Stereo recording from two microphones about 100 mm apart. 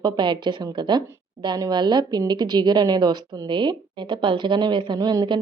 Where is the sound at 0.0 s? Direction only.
50° right (ahead or behind).